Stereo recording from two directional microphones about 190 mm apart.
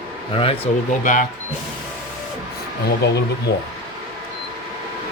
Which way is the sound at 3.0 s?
60° left (ahead or behind).